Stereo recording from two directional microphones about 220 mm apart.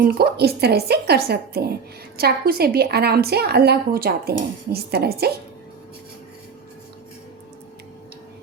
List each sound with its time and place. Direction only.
0.0 s a woman's voice: 45° right (ahead or behind)